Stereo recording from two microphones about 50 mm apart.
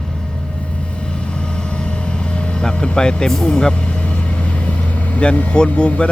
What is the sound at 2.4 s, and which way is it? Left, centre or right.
Vehicle, centre.